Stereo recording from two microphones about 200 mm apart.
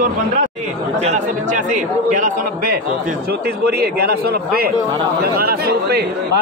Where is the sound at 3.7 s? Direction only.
50° right (ahead or behind).